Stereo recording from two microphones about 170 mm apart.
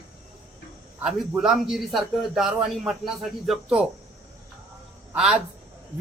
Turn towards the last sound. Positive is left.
turn(degrees=-5)  # may be behind; listen again after turning